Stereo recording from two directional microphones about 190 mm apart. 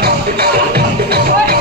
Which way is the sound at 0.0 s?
55° right (ahead or behind).